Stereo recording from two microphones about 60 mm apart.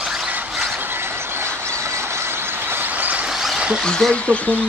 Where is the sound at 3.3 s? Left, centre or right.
Centre.